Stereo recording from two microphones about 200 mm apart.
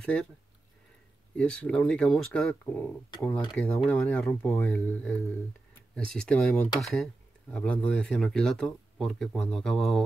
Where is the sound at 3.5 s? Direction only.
Centre (ahead or behind).